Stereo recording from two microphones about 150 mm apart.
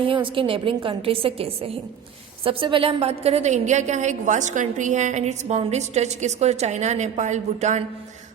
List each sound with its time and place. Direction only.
0.0 s a woman's voice: 35° right (ahead or behind); by 7.8 s 50° right (ahead or behind)